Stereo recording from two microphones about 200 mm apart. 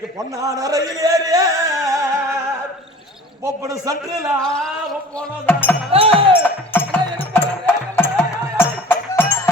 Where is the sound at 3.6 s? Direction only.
15° right (ahead or behind).